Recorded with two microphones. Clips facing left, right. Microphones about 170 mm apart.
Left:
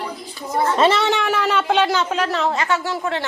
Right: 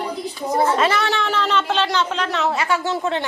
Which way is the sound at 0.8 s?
25° left (ahead or behind).